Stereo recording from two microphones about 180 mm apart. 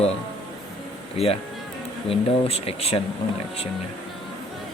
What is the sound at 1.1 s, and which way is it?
Speech, 35° left (ahead or behind).